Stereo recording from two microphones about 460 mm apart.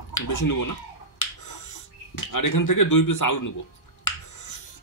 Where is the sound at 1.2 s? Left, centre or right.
Left.